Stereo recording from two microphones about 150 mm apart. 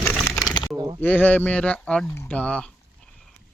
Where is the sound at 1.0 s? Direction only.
10° left (ahead or behind).